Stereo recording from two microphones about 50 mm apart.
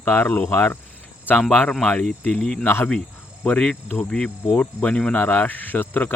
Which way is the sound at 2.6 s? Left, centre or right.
Left.